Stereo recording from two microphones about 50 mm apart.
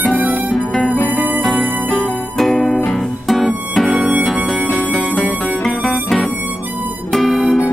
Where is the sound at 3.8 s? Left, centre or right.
Centre.